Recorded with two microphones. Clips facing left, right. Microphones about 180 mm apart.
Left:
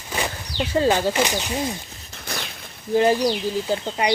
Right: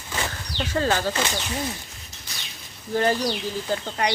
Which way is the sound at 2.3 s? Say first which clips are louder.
Left 13 dB; 65° left (ahead or behind).